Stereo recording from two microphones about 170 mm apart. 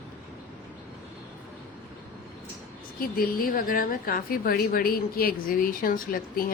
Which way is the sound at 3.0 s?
60° left (ahead or behind).